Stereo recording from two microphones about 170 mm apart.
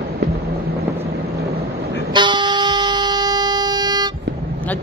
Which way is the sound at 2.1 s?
25° right (ahead or behind).